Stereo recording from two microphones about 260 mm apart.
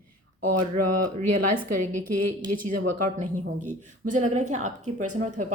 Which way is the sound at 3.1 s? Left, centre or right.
Right.